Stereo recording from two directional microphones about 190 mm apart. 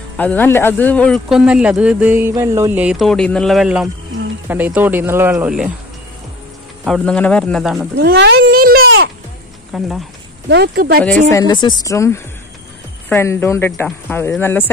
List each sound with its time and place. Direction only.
0.2 s speech: 10° left (ahead or behind)
6.8 s speech: centre (ahead or behind)
8.0 s speech: 60° right (ahead or behind)
8.8 s a sound: 75° right (ahead or behind)
9.7 s speech: centre (ahead or behind)
10.5 s speech: 60° right (ahead or behind)
11.1 s speech: 10° left (ahead or behind)